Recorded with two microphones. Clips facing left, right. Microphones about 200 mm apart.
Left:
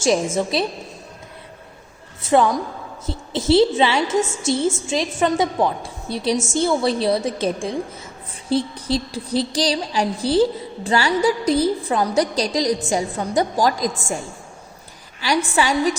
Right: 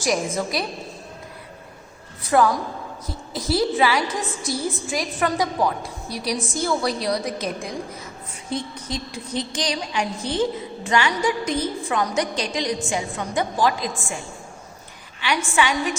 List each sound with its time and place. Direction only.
0.5 s a woman's voice: 25° left (ahead or behind)
2.2 s a woman's voice: 25° left (ahead or behind); by 14.2 s 40° left (ahead or behind)
15.2 s a woman's voice: 40° left (ahead or behind)